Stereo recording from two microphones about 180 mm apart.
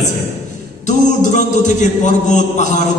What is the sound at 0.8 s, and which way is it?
A man's voice, 45° left (ahead or behind).